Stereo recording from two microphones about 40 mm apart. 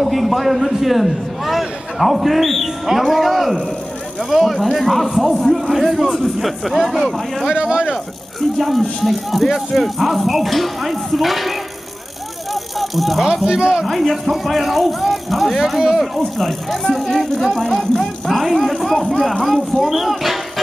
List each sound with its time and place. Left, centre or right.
0.0 s a man's voice: centre
7.5 s speech: centre
7.9 s a man's voice: centre
12.7 s speech: centre
13.5 s speech: right
13.8 s a man's voice: centre